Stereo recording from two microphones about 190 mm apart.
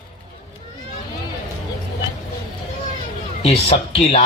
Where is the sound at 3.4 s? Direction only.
30° left (ahead or behind).